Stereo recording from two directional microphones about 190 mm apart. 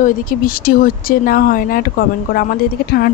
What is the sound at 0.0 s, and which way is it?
A woman's voice, 50° left (ahead or behind).